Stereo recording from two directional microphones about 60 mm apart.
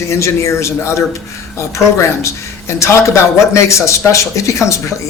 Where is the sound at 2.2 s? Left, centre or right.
Left.